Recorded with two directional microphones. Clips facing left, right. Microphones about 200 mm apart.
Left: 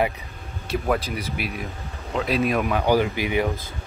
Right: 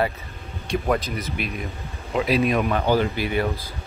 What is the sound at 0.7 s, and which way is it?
Speech, 5° left (ahead or behind).